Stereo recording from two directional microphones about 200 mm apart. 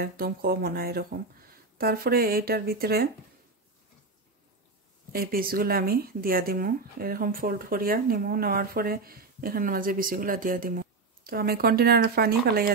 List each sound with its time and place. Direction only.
0.0 s speech: 50° right (ahead or behind)
5.1 s speech: 45° right (ahead or behind)